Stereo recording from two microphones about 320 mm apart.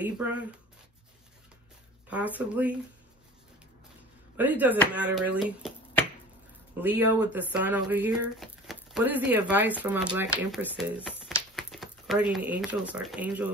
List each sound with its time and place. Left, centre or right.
0.0 s speech: centre
2.0 s speech: centre
4.4 s speech: centre